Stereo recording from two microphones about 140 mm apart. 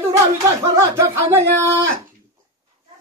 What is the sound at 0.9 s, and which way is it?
Speech, 20° right (ahead or behind).